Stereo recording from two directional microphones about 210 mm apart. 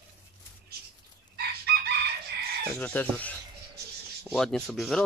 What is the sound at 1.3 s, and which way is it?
Chicken, 50° right (ahead or behind).